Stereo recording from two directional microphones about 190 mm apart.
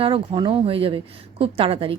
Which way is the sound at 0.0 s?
30° right (ahead or behind).